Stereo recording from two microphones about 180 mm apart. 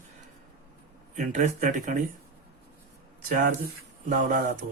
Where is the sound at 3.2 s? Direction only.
50° right (ahead or behind).